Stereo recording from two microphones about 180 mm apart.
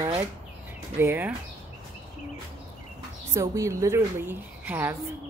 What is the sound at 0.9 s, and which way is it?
Speech, 10° right (ahead or behind).